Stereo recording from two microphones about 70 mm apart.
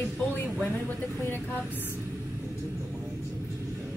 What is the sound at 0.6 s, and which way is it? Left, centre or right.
Speech, left.